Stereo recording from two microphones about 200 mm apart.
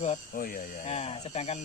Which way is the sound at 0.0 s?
40° left (ahead or behind).